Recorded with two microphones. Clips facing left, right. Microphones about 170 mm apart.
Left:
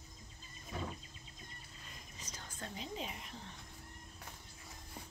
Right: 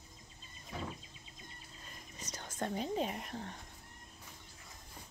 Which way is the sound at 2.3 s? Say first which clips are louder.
Right 9 dB; 75° right (ahead or behind).